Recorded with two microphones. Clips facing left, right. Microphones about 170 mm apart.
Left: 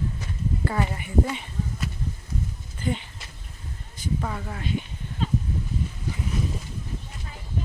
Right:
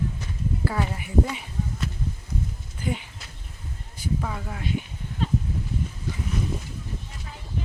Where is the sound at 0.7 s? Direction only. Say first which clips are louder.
Left 2 dB; 5° right (ahead or behind).